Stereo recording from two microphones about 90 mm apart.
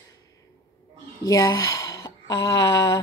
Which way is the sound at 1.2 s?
40° left (ahead or behind).